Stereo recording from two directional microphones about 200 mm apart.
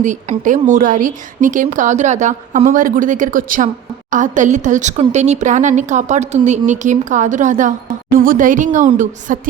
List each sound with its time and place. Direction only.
0.0 s a woman's voice: 40° right (ahead or behind)